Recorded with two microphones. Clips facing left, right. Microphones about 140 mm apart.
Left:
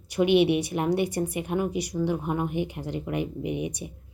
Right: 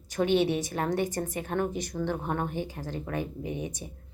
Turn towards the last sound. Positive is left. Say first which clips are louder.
# left 5 dB
turn(degrees=15)  # may be behind; listen again after turning